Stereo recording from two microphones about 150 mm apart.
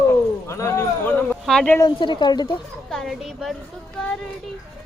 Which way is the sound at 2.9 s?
Centre (ahead or behind).